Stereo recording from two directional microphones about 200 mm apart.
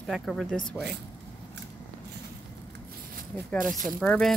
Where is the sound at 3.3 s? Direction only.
5° left (ahead or behind).